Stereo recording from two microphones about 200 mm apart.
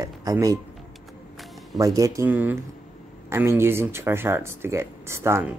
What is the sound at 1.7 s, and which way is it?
Speech, 15° right (ahead or behind).